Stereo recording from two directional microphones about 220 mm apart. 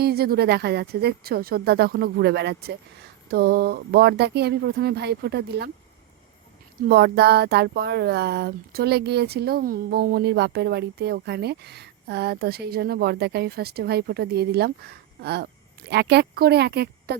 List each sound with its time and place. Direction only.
0.0 s speech: 45° right (ahead or behind)
6.8 s speech: 45° right (ahead or behind)